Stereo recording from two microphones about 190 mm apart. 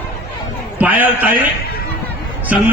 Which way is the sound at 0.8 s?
10° right (ahead or behind).